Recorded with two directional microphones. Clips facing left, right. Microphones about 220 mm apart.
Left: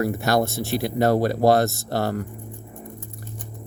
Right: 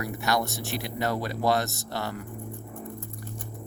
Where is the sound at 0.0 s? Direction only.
45° left (ahead or behind).